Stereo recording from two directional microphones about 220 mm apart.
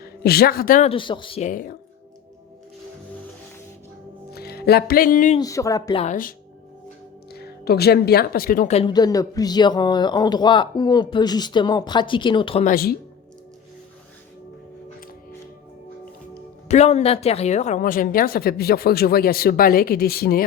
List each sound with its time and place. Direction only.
0.0 s speech: 45° left (ahead or behind)
0.9 s speech: 20° left (ahead or behind)
4.3 s music: 45° left (ahead or behind)
5.4 s speech: 15° left (ahead or behind)
6.0 s speech: 35° left (ahead or behind)
12.6 s speech: 45° left (ahead or behind)
16.6 s speech: 30° left (ahead or behind)